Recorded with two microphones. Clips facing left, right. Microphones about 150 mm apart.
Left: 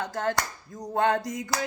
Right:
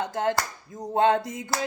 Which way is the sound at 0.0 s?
20° right (ahead or behind).